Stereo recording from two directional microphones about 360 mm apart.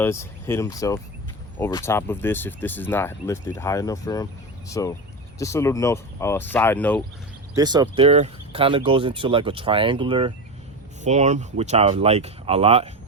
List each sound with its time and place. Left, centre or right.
0.0 s speech: centre
7.5 s speech: centre